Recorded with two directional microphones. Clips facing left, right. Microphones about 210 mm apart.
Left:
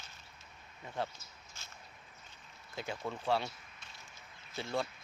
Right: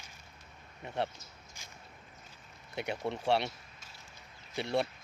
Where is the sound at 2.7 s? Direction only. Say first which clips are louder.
Right 4 dB; 70° right (ahead or behind).